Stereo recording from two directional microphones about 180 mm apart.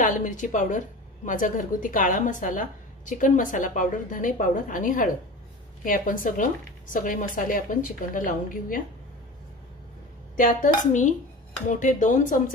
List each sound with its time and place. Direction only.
0.0 s a woman's voice: 45° left (ahead or behind)
10.3 s a woman's voice: 45° left (ahead or behind)